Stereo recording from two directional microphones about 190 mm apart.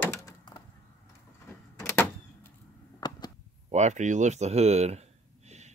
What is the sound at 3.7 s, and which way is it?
Speech, 40° right (ahead or behind).